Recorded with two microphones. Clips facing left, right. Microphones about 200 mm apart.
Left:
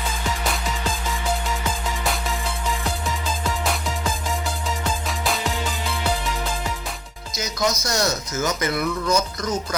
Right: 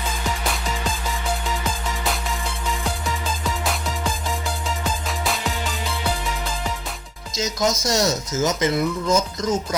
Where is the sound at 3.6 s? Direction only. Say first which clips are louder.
Even; centre (ahead or behind).